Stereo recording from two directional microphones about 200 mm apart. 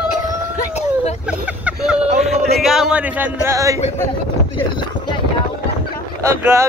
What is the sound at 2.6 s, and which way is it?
A man's voice, centre (ahead or behind).